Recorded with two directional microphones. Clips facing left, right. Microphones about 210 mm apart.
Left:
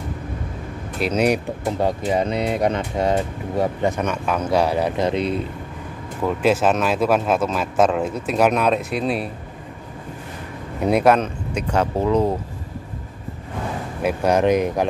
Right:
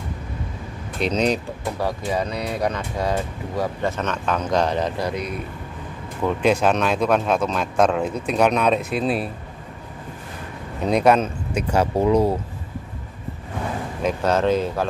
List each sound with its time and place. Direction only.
0.9 s speech: 5° left (ahead or behind)
1.8 s speech: 25° left (ahead or behind)
4.9 s speech: 25° left (ahead or behind)
6.2 s speech: 5° left (ahead or behind)
10.8 s speech: 5° left (ahead or behind); by 12.4 s 10° right (ahead or behind)
14.0 s speech: 15° left (ahead or behind)